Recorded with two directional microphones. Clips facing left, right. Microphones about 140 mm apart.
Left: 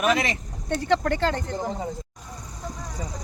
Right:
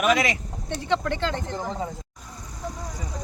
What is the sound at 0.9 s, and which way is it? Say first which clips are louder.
Speech: left 2 dB; 50° left (ahead or behind).